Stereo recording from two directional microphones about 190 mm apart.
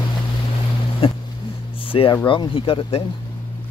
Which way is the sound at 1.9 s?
25° left (ahead or behind).